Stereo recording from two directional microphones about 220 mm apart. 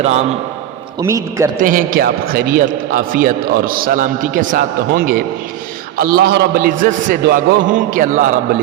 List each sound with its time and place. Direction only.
0.0 s a man's voice: 30° right (ahead or behind)
0.9 s a man's voice: 15° right (ahead or behind)
1.5 s a man's voice: 40° right (ahead or behind)